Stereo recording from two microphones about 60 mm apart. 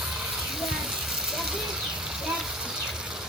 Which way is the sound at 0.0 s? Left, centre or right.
Centre.